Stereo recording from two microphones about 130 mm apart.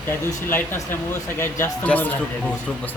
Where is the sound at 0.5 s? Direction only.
15° left (ahead or behind).